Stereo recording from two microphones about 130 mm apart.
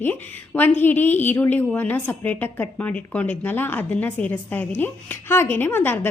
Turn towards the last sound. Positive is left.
turn(degrees=15)  # may be behind; listen again after turning